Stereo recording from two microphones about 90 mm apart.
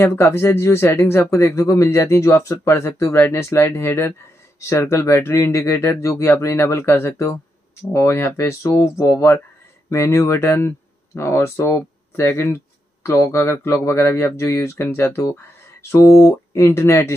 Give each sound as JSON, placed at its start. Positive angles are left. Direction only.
{"t": 0.0, "sound": "speech", "side_deg": 25}